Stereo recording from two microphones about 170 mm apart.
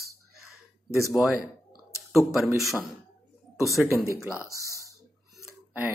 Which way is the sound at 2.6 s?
Centre (ahead or behind).